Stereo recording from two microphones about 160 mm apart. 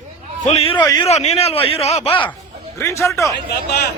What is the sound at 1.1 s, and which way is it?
A man's voice, 45° left (ahead or behind).